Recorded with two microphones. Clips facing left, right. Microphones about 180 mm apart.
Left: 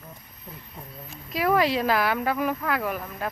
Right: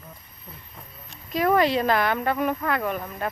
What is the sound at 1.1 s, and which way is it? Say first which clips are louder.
Speech: right 2 dB; 5° left (ahead or behind).